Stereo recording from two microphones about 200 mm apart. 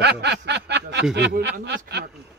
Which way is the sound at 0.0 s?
55° right (ahead or behind).